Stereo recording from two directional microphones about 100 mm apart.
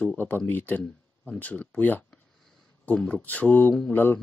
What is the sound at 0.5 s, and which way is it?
Speech, 20° left (ahead or behind).